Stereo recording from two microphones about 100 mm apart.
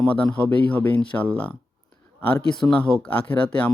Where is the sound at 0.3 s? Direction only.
15° left (ahead or behind).